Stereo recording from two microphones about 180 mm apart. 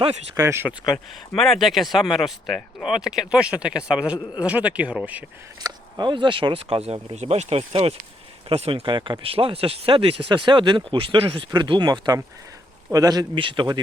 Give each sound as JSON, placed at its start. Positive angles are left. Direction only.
{"t": 0.3, "sound": "speech", "side_deg": -15}
{"t": 1.3, "sound": "speech", "side_deg": 5}
{"t": 5.6, "sound": "speech", "side_deg": -25}